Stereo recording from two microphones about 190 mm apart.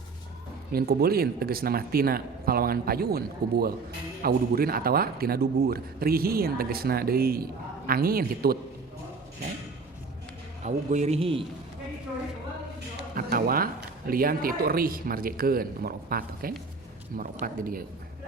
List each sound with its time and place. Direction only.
0.7 s a man's voice: 55° right (ahead or behind)
10.6 s a man's voice: 35° right (ahead or behind)
13.1 s a man's voice: 50° right (ahead or behind)